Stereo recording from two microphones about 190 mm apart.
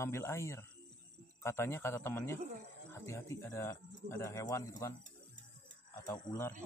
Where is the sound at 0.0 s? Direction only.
15° left (ahead or behind).